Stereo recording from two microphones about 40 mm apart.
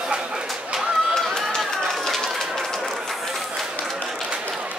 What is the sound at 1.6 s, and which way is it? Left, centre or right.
Run, centre.